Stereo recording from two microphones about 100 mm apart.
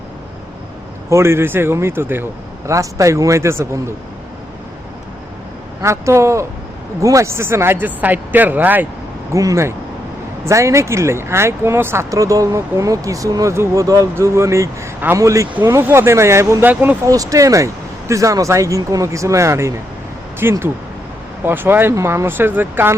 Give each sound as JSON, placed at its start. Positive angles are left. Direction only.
{"t": 1.1, "sound": "speech", "side_deg": -25}
{"t": 5.8, "sound": "speech", "side_deg": -30}
{"t": 9.3, "sound": "speech", "side_deg": -35}
{"t": 17.1, "sound": "speech", "side_deg": -35}